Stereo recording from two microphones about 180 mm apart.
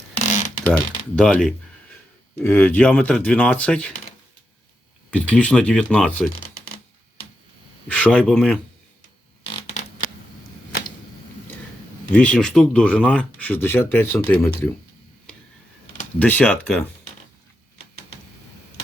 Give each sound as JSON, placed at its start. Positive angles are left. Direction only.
{"t": 0.2, "sound": "a sound", "side_deg": 40}
{"t": 0.6, "sound": "speech", "side_deg": 5}
{"t": 5.1, "sound": "speech", "side_deg": 5}
{"t": 7.9, "sound": "speech", "side_deg": 5}
{"t": 12.1, "sound": "speech", "side_deg": 5}
{"t": 16.1, "sound": "speech", "side_deg": 10}